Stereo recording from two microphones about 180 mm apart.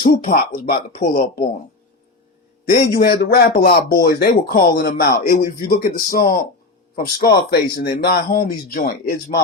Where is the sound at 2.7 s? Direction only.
60° left (ahead or behind).